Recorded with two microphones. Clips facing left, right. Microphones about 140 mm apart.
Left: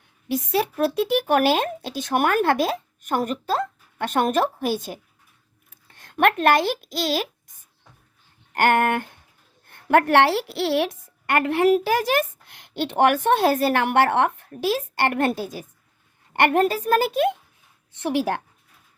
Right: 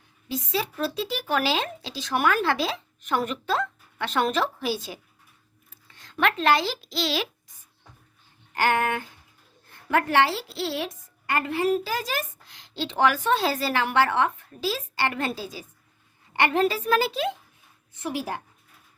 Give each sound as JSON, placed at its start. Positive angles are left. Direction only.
{"t": 0.3, "sound": "speech", "side_deg": 60}
{"t": 8.5, "sound": "a woman's voice", "side_deg": 60}
{"t": 17.9, "sound": "a woman's voice", "side_deg": 80}